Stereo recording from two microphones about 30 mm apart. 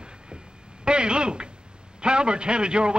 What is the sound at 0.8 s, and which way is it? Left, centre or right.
A man's voice, right.